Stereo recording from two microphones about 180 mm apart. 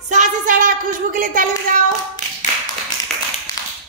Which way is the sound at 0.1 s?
45° right (ahead or behind).